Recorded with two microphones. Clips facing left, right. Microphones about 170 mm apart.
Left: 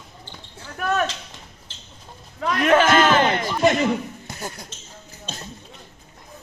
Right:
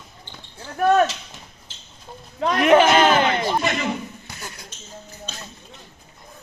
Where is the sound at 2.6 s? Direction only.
15° right (ahead or behind).